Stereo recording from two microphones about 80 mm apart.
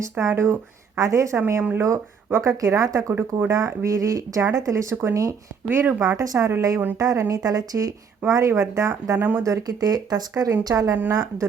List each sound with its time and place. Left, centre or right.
0.0 s speech: right
0.9 s speech: right
5.6 s speech: right
6.0 s speech: right
9.1 s speech: right
9.4 s speech: right